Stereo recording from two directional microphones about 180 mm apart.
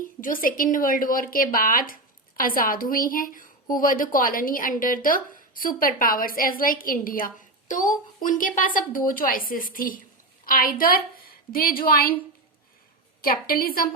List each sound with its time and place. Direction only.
0.0 s speech: 50° left (ahead or behind)
13.2 s speech: 55° left (ahead or behind)